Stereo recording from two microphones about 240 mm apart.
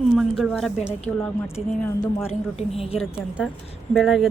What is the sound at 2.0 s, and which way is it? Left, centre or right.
Speech, left.